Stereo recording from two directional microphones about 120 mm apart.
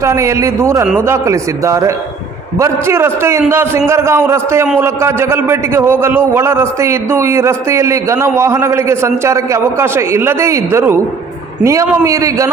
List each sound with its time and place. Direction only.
0.0 s a man's voice: 25° right (ahead or behind)